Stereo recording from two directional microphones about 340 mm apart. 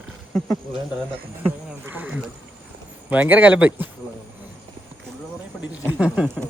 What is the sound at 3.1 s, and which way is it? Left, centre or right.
Speech, centre.